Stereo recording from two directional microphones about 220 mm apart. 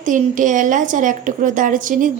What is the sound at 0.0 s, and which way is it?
A woman's voice, 35° right (ahead or behind).